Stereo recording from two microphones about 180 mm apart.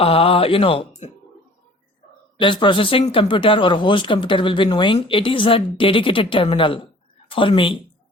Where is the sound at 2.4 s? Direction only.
25° left (ahead or behind).